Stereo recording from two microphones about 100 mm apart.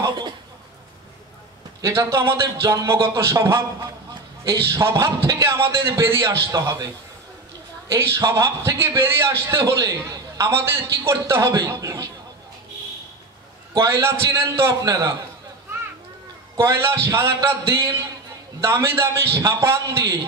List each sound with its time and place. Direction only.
0.0 s a sound: 50° right (ahead or behind)
1.8 s a man's voice: 40° right (ahead or behind)
2.0 s a man's voice: 30° right (ahead or behind)
7.9 s a man's voice: 30° right (ahead or behind)
13.7 s a man's voice: 30° right (ahead or behind)
16.5 s a man's voice: 25° right (ahead or behind)